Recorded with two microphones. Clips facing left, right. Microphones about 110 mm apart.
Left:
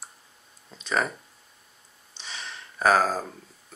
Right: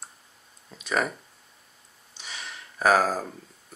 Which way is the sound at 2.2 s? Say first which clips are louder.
Left 1 dB; 30° left (ahead or behind).